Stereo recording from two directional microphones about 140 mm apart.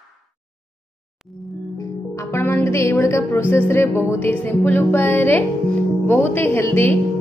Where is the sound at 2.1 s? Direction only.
15° left (ahead or behind).